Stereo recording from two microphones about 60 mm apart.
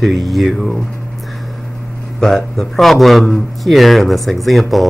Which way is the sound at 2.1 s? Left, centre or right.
Centre.